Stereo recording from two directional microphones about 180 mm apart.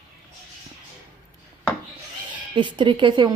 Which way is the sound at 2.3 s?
25° right (ahead or behind).